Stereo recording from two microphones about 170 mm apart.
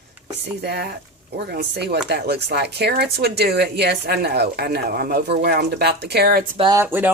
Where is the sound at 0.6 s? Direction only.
70° right (ahead or behind).